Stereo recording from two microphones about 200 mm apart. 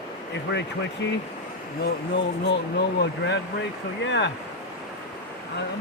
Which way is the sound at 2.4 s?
55° left (ahead or behind).